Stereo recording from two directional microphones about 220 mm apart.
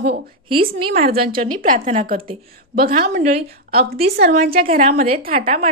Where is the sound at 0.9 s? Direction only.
40° right (ahead or behind).